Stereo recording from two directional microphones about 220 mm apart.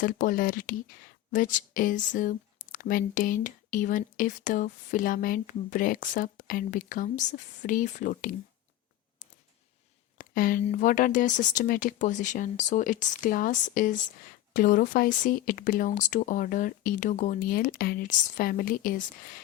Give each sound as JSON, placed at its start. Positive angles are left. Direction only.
{"t": 0.0, "sound": "speech", "side_deg": 40}
{"t": 10.2, "sound": "speech", "side_deg": 40}